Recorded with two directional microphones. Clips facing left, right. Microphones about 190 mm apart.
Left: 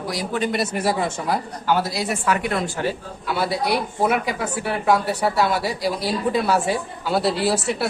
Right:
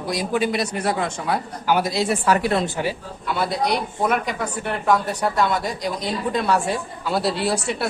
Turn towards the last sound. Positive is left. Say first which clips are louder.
# left 2 dB
turn(degrees=5)  # may be behind; listen again after turning